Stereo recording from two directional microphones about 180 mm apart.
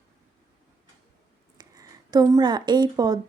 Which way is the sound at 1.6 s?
20° right (ahead or behind).